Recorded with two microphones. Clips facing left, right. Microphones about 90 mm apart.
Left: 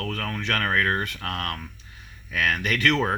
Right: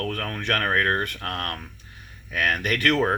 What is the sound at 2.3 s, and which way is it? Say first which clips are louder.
Speech: right 1 dB; 40° right (ahead or behind).